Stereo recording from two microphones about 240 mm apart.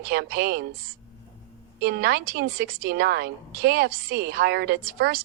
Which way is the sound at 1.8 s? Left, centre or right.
Right.